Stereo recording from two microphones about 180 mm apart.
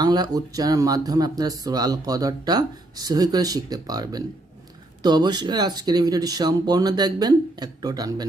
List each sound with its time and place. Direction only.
0.0 s speech: 20° right (ahead or behind)